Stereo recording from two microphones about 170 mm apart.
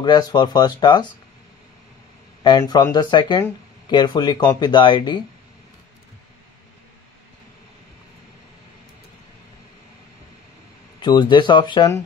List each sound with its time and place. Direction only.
0.0 s speech: 25° left (ahead or behind)
2.4 s speech: 25° left (ahead or behind)
11.0 s speech: 25° left (ahead or behind)